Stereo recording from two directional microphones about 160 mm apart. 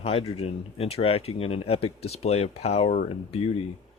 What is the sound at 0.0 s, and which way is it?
Speech, 40° left (ahead or behind).